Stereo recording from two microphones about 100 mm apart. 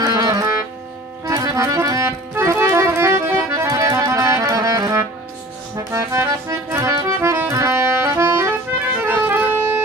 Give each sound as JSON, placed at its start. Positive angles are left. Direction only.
{"t": 0.0, "sound": "music", "side_deg": -40}
{"t": 3.6, "sound": "music", "side_deg": -35}